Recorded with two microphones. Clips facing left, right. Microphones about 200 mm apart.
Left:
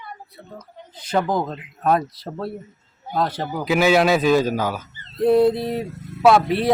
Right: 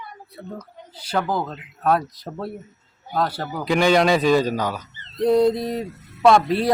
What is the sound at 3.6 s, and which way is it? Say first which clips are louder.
Speech: even; 5° left (ahead or behind).